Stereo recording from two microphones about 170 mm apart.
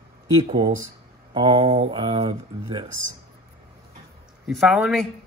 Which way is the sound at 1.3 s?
35° right (ahead or behind).